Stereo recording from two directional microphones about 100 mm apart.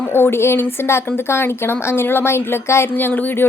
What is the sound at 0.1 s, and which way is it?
Speech, 25° left (ahead or behind).